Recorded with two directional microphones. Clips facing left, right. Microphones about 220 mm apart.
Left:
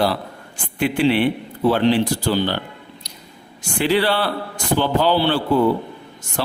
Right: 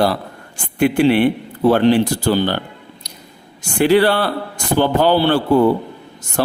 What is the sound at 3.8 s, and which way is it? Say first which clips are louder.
A man's voice: right 5 dB; 50° right (ahead or behind).